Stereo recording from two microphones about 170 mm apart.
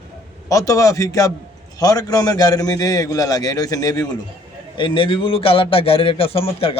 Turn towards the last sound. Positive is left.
turn(degrees=35)  # may be behind; listen again after turning